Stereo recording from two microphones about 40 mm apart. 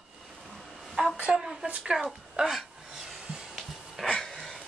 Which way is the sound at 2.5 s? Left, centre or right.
Centre.